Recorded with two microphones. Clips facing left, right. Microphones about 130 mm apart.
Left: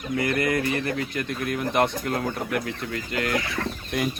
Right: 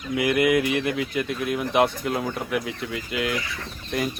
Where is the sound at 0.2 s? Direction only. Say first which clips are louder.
Right 4 dB; 10° right (ahead or behind).